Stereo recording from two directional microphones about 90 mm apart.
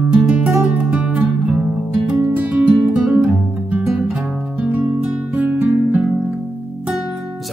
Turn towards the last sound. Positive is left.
turn(degrees=-15)  # may be behind; listen again after turning